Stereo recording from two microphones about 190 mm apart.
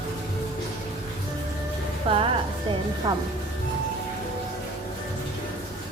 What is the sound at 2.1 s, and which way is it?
A woman's voice, 30° right (ahead or behind).